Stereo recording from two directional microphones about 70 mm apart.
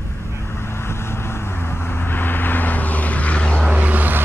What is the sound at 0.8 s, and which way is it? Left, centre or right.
Vehicle, left.